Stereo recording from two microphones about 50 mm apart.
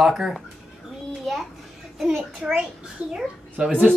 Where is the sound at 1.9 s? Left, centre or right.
Centre.